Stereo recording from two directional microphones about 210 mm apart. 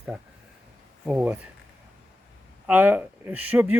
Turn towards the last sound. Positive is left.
turn(degrees=-5)  # may be behind; listen again after turning